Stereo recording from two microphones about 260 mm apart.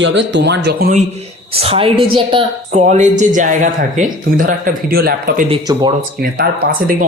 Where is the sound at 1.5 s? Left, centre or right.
Right.